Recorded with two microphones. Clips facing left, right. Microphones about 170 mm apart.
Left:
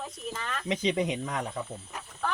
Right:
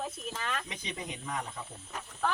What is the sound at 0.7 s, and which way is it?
Speech, 90° left.